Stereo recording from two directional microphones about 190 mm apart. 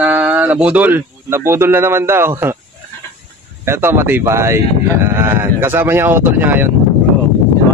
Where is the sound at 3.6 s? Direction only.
10° right (ahead or behind).